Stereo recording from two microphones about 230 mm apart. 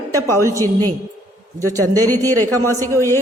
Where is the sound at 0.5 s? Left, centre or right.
Centre.